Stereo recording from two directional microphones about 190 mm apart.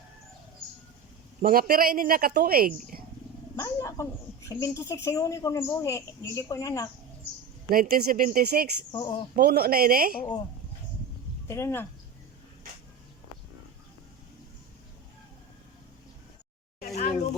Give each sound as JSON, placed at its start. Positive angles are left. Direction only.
{"t": 1.4, "sound": "speech", "side_deg": -50}
{"t": 3.5, "sound": "a woman's voice", "side_deg": 15}
{"t": 7.7, "sound": "speech", "side_deg": -50}
{"t": 8.9, "sound": "speech", "side_deg": 20}
{"t": 9.3, "sound": "speech", "side_deg": -55}
{"t": 11.4, "sound": "a woman's voice", "side_deg": 15}
{"t": 16.8, "sound": "a sound", "side_deg": 50}